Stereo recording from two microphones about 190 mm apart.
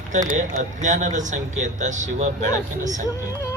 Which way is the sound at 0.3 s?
40° right (ahead or behind).